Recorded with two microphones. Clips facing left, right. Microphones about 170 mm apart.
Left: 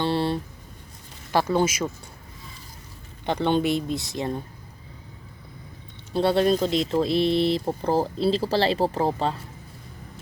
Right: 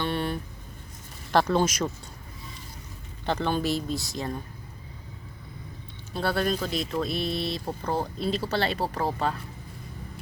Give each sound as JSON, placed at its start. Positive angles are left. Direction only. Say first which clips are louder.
{"t": 0.0, "sound": "a sound", "louder": "left 5 dB", "side_deg": 30}
{"t": 1.3, "sound": "speech", "louder": "left 1 dB", "side_deg": 10}
{"t": 3.2, "sound": "speech", "louder": "left 4 dB", "side_deg": 20}
{"t": 6.1, "sound": "speech", "louder": "left 6 dB", "side_deg": 25}